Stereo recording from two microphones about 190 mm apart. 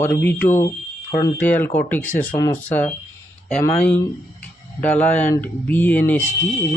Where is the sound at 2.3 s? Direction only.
20° left (ahead or behind).